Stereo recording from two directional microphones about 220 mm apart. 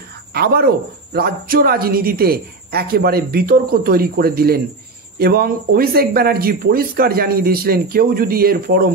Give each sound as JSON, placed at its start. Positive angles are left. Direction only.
{"t": 0.3, "sound": "speech", "side_deg": -45}